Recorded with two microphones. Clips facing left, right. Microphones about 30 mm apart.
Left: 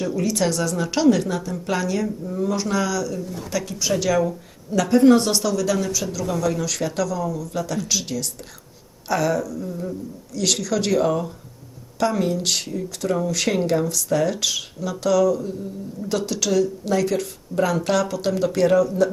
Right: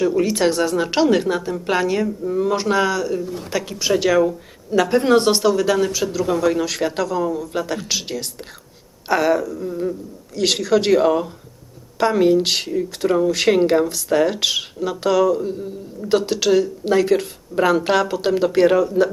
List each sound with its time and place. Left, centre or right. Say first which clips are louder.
0.0 s speech: right 5 dB; right
3.3 s speech: right 2 dB; right